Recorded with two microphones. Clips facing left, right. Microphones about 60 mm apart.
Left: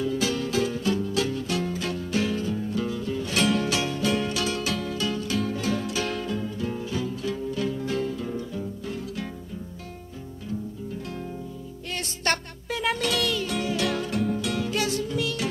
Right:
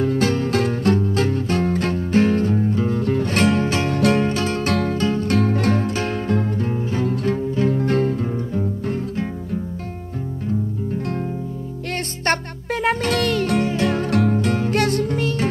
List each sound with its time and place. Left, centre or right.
0.0 s music: right
3.0 s music: right
3.9 s music: right
4.3 s music: right
5.3 s music: right
6.3 s music: right
6.7 s music: right
7.1 s music: right
11.9 s music: right
13.7 s music: right
14.8 s music: right